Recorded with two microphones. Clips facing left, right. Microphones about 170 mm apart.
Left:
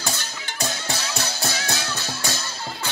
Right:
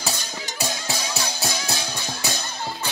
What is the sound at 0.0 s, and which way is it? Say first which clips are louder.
Music: right 1 dB; 5° right (ahead or behind).